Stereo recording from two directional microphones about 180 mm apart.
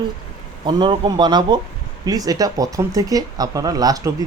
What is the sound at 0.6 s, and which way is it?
Speech, 25° right (ahead or behind).